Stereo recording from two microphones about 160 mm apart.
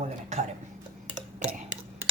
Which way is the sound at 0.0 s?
45° right (ahead or behind).